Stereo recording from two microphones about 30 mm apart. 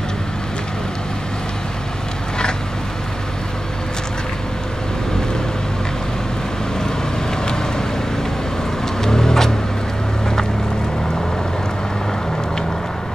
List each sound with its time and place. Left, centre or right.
9.0 s vehicle: centre